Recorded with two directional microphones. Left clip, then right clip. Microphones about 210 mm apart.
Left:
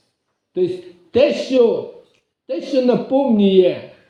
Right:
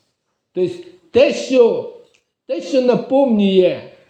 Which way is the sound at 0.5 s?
25° right (ahead or behind).